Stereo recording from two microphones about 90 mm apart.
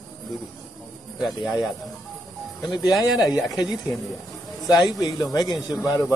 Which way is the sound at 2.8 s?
40° left (ahead or behind).